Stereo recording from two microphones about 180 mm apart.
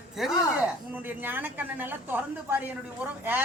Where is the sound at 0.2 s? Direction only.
5° right (ahead or behind).